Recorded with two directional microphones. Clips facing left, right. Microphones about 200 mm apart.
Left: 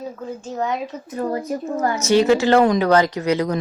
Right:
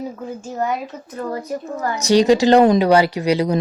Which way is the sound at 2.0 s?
15° right (ahead or behind).